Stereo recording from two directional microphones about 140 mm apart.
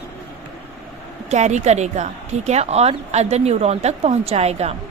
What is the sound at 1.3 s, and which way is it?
A woman's voice, 55° right (ahead or behind).